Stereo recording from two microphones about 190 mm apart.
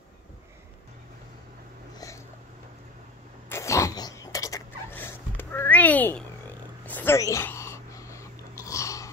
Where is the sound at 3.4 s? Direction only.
15° left (ahead or behind).